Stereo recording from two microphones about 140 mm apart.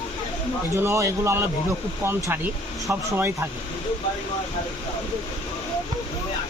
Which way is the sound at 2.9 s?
20° right (ahead or behind).